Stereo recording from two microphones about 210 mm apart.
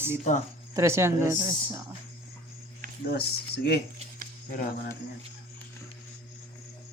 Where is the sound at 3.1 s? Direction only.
50° left (ahead or behind).